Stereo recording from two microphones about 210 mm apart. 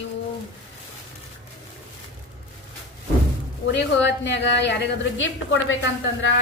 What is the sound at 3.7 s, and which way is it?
A woman's voice, 55° left (ahead or behind).